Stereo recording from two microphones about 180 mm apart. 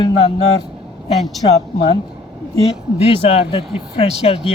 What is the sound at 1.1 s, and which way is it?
Speech, centre (ahead or behind).